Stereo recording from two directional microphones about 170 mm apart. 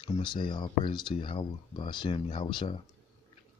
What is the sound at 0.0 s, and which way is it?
Speech, 30° left (ahead or behind).